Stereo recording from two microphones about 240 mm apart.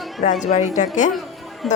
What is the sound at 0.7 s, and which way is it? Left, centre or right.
Speech, left.